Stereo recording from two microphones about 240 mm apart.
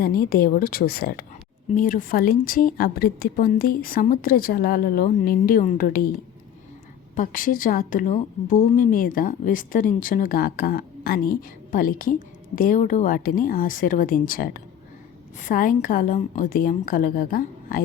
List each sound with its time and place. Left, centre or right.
0.0 s a woman's voice: left
7.2 s a woman's voice: left